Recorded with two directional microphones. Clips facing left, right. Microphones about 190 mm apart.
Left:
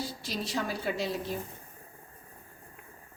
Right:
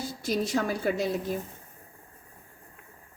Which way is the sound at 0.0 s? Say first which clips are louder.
Right 6 dB; 45° right (ahead or behind).